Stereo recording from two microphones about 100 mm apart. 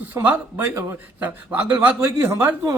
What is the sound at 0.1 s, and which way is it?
A man's voice, 30° right (ahead or behind).